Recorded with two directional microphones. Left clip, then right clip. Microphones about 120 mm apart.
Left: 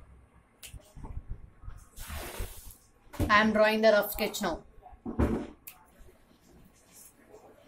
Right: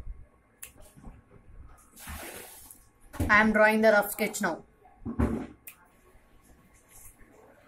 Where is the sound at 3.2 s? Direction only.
15° right (ahead or behind).